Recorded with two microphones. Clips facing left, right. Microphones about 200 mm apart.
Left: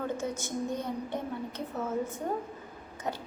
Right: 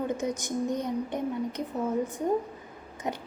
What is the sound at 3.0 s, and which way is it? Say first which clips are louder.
Speech: right 2 dB; 15° right (ahead or behind).